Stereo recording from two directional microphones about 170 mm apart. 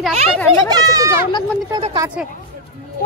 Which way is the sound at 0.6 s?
20° right (ahead or behind).